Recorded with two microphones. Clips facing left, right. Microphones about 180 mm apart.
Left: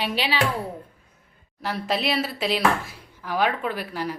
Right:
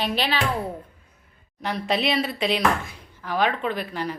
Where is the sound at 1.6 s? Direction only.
5° left (ahead or behind).